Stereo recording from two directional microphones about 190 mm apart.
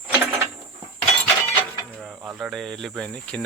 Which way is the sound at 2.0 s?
5° right (ahead or behind).